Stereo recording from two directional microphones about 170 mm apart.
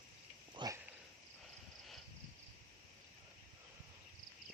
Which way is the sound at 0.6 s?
20° right (ahead or behind).